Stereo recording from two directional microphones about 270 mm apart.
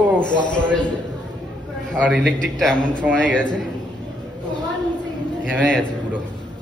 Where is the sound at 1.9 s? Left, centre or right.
Centre.